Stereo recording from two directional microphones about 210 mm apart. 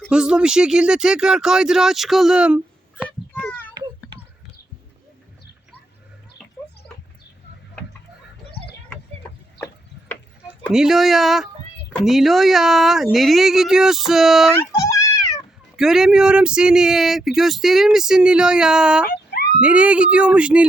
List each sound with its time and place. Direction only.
0.1 s speech: 5° right (ahead or behind)
3.4 s a sound: 10° left (ahead or behind)
10.7 s speech: centre (ahead or behind)
14.5 s a sound: 15° left (ahead or behind)
15.7 s speech: centre (ahead or behind)
19.0 s dog: 45° left (ahead or behind)
19.5 s speech: 5° right (ahead or behind)